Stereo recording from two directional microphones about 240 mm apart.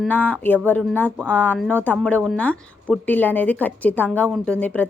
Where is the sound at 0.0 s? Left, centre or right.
Centre.